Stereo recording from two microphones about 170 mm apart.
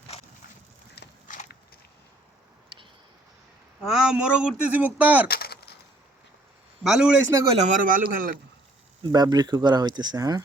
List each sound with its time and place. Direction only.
1.0 s biting: 70° left (ahead or behind)
3.8 s a man's voice: 5° right (ahead or behind)
5.3 s a sound: 65° left (ahead or behind)
6.8 s a man's voice: 5° right (ahead or behind)
7.5 s speech: 45° right (ahead or behind)
9.1 s speech: 25° right (ahead or behind)